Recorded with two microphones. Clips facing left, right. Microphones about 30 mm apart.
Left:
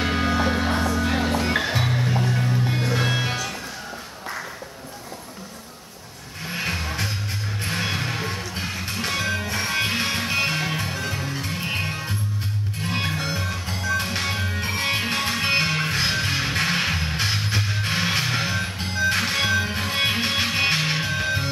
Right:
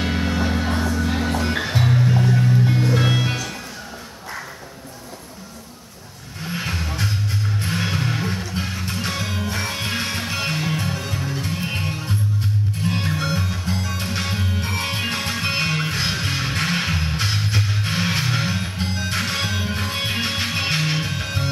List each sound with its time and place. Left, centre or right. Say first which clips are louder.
0.0 s music: left 1 dB; centre
6.5 s vehicle: even; centre
7.7 s music: right 1 dB; centre